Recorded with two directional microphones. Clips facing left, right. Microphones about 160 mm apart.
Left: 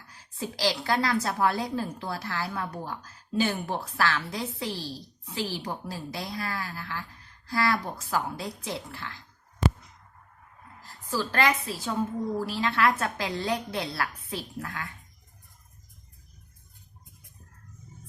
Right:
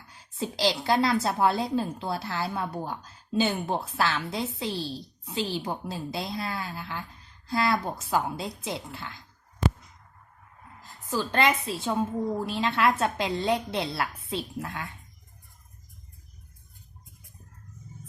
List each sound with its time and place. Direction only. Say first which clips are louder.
0.1 s a woman's voice: right 3 dB; 20° right (ahead or behind)
10.8 s a woman's voice: right 1 dB; 20° right (ahead or behind)